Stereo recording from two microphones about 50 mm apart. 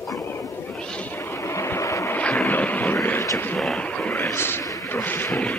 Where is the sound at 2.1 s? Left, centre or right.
Left.